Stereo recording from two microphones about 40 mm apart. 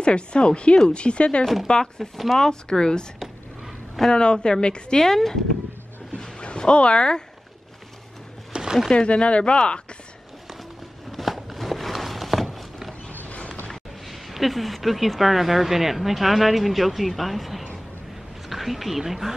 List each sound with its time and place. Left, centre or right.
0.0 s a woman's voice: left
1.7 s speech: centre
4.1 s a woman's voice: left
5.0 s speech: centre
6.1 s speech: left
8.5 s a sound: centre
8.9 s a woman's voice: left
11.1 s walk: centre
13.1 s a sound: left
13.7 s speech: centre